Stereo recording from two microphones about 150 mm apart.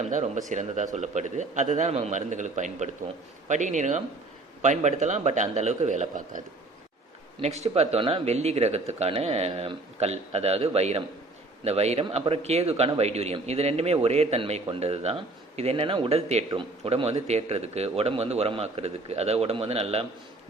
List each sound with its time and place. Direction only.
0.1 s a man's voice: 55° right (ahead or behind)
7.3 s a man's voice: 45° right (ahead or behind)